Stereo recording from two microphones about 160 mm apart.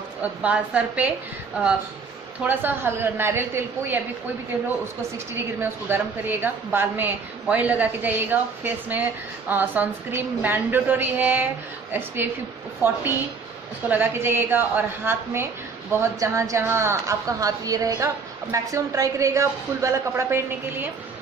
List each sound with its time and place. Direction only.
0.2 s a woman's voice: 10° right (ahead or behind)
5.1 s a woman's voice: 15° right (ahead or behind)
13.8 s a woman's voice: 10° right (ahead or behind)